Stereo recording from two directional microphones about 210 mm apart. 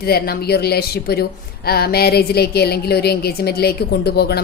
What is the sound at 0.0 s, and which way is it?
A woman's voice, 45° left (ahead or behind).